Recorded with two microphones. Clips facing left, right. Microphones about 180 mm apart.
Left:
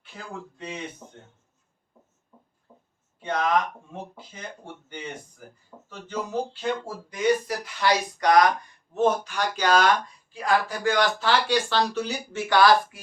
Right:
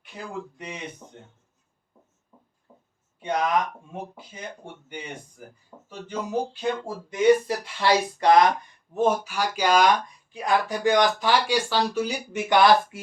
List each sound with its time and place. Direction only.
0.5 s speech: 15° right (ahead or behind)
3.2 s a sound: 15° right (ahead or behind)
3.9 s speech: 10° right (ahead or behind)
8.9 s speech: 10° right (ahead or behind)